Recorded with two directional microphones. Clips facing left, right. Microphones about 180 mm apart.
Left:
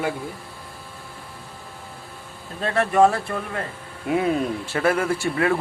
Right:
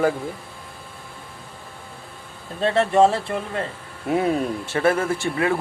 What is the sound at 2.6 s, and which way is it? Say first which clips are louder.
Speech: right 1 dB; 25° right (ahead or behind).